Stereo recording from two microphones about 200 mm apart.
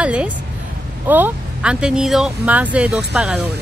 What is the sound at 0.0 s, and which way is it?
A woman's voice, 5° right (ahead or behind).